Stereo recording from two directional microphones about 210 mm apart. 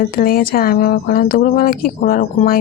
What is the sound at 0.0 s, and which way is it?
A woman's voice, 45° left (ahead or behind).